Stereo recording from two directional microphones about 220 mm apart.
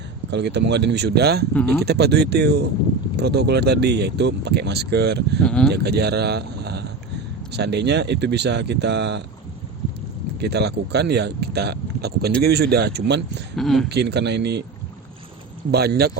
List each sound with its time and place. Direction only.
0.3 s speech: 50° right (ahead or behind)
5.4 s speech: 5° left (ahead or behind)
5.7 s speech: 45° right (ahead or behind)
10.4 s speech: 50° right (ahead or behind)
13.6 s speech: centre (ahead or behind)
13.9 s speech: 50° right (ahead or behind)
15.7 s speech: 45° right (ahead or behind)